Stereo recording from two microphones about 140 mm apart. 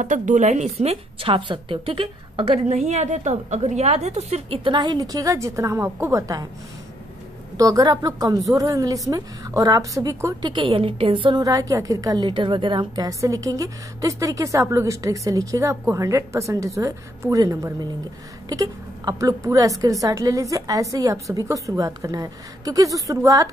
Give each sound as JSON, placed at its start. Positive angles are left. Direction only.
{"t": 0.0, "sound": "a woman's voice", "side_deg": -60}
{"t": 2.9, "sound": "a woman's voice", "side_deg": -55}
{"t": 7.5, "sound": "a woman's voice", "side_deg": -25}